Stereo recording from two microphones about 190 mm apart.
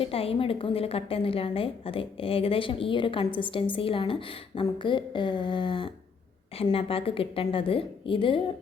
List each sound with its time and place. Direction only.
0.0 s a woman's voice: 30° left (ahead or behind)